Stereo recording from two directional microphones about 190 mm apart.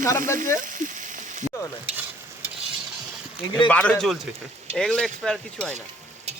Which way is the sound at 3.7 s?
5° left (ahead or behind).